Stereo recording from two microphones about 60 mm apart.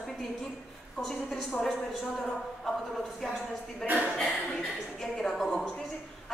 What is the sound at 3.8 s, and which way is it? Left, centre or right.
Speech, right.